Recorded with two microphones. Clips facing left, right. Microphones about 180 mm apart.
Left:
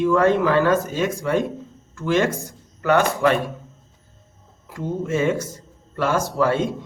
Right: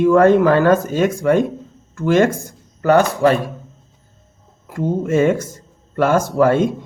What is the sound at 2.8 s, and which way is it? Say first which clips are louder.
Speech: right 5 dB; 40° right (ahead or behind).